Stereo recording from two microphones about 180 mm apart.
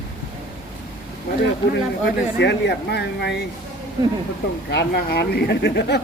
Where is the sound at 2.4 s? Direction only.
70° left (ahead or behind).